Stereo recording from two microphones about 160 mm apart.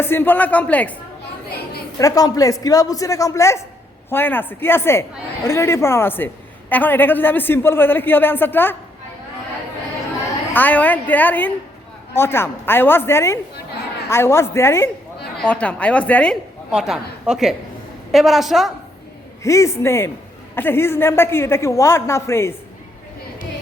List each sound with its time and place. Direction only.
0.0 s a woman's voice: 15° left (ahead or behind)
2.0 s a woman's voice: 20° left (ahead or behind)
10.5 s a woman's voice: 10° left (ahead or behind)
16.7 s a woman's voice: 5° right (ahead or behind)
19.4 s a woman's voice: 20° left (ahead or behind)